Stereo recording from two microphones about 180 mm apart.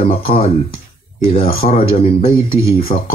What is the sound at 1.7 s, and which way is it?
Speech, 35° left (ahead or behind).